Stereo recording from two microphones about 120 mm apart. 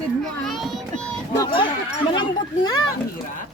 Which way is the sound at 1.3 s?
35° left (ahead or behind).